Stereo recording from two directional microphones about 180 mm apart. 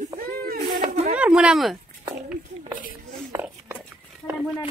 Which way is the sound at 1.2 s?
5° right (ahead or behind).